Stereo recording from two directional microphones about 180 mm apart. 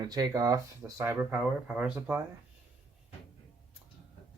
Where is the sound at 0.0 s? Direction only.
20° right (ahead or behind).